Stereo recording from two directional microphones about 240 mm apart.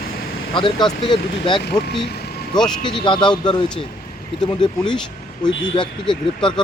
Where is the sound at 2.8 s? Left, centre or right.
Centre.